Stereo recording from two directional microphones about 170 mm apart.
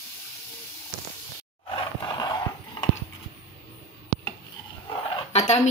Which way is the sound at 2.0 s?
25° left (ahead or behind).